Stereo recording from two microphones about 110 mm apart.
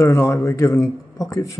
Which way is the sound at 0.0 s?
25° left (ahead or behind).